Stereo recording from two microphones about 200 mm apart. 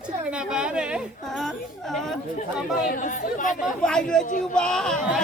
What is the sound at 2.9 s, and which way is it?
Speech, 45° left (ahead or behind).